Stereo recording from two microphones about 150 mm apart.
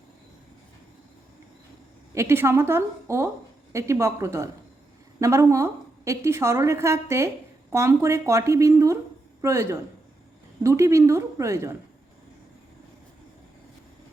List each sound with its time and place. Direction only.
2.1 s a woman's voice: 15° right (ahead or behind)